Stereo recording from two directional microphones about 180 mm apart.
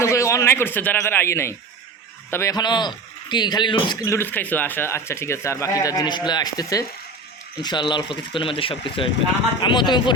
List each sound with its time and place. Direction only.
0.0 s a man's voice: 15° left (ahead or behind)